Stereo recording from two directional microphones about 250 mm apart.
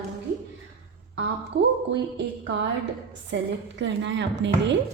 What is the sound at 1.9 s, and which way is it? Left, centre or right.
A woman's voice, right.